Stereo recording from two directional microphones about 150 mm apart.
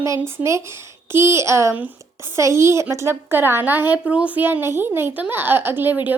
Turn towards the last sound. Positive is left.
turn(degrees=-10)  # may be behind; listen again after turning